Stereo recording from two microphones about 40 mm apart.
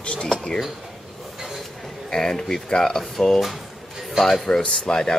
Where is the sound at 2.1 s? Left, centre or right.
Centre.